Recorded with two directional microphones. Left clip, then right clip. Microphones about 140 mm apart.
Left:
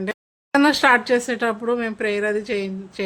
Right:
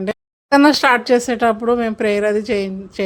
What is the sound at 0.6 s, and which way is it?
Speech, 35° right (ahead or behind).